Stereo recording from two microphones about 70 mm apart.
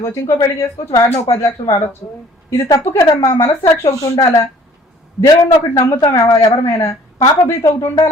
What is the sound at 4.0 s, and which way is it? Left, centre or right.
Speech, left.